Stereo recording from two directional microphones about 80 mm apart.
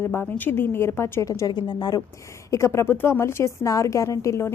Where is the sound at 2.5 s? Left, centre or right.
Left.